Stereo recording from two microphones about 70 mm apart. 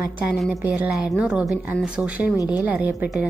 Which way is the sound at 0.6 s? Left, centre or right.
Right.